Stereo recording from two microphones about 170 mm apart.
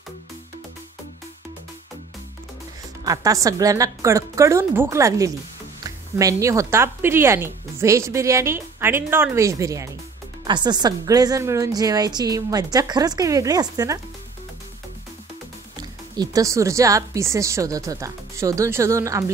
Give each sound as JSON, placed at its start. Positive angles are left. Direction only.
{"t": 3.1, "sound": "speech", "side_deg": -20}
{"t": 15.8, "sound": "speech", "side_deg": -20}